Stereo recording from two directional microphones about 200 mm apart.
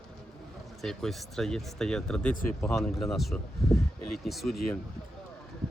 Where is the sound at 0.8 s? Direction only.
Centre (ahead or behind).